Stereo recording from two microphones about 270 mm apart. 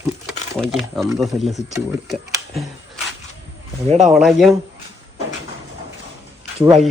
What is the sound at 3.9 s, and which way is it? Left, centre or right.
Speech, right.